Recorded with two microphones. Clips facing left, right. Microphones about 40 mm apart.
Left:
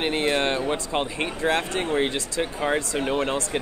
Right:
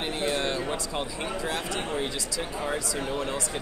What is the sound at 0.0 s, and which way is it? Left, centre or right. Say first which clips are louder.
A man's voice: left 5 dB; left.